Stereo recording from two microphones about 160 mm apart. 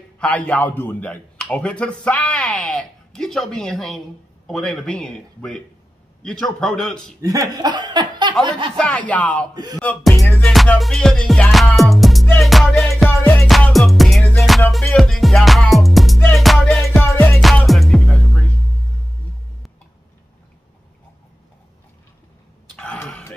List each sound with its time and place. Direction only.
0.2 s a man's voice: 5° left (ahead or behind)
7.2 s speech: 20° right (ahead or behind)
8.7 s a man's voice: 5° left (ahead or behind)
9.8 s music: 5° left (ahead or behind)
17.0 s music: 15° left (ahead or behind)
17.4 s music: centre (ahead or behind)
22.8 s a sound: 5° left (ahead or behind)